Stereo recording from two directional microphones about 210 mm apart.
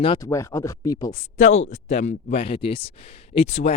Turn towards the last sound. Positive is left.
turn(degrees=30)  # may be behind; listen again after turning